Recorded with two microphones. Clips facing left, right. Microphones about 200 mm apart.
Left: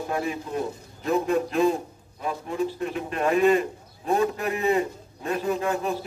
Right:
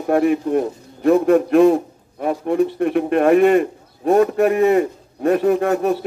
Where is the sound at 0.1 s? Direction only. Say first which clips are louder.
Right 14 dB; 60° right (ahead or behind).